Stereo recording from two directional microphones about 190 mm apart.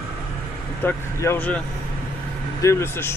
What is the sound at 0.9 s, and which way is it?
Speech, 10° left (ahead or behind).